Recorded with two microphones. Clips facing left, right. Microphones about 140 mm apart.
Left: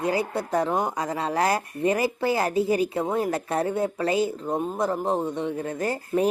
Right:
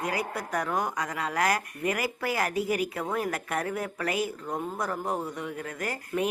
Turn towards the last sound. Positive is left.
turn(degrees=30)  # may be behind; listen again after turning